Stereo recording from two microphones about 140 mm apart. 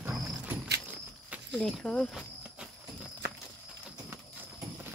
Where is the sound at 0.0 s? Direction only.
10° right (ahead or behind).